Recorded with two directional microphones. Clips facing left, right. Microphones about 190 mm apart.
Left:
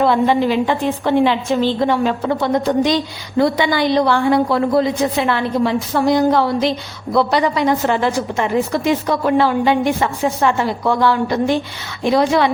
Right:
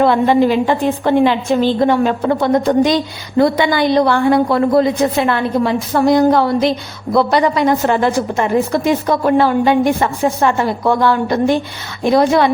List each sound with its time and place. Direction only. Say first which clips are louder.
0.0 s a woman's voice: right 3 dB; 50° right (ahead or behind)